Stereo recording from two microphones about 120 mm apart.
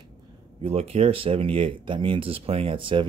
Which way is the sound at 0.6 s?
55° right (ahead or behind).